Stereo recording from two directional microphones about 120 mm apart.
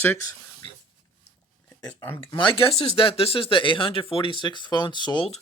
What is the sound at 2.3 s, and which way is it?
Speech, 40° left (ahead or behind).